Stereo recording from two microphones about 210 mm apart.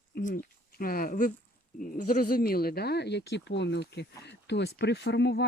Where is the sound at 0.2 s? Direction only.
40° left (ahead or behind).